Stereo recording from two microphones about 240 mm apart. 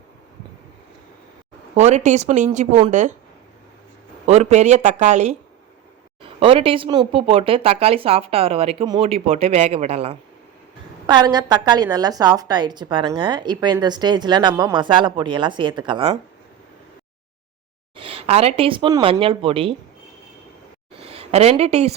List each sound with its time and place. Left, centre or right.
1.7 s speech: right
4.3 s speech: right
6.4 s a woman's voice: right
17.9 s speech: right
21.0 s a woman's voice: right